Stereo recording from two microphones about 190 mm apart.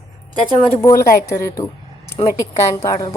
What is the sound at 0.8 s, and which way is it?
Speech, 15° left (ahead or behind).